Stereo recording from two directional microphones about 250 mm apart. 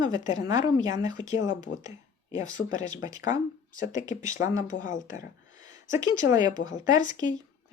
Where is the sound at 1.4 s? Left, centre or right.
Left.